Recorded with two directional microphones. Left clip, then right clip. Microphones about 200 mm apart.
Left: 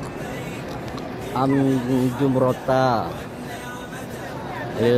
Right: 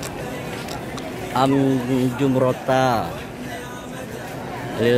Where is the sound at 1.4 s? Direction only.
25° right (ahead or behind).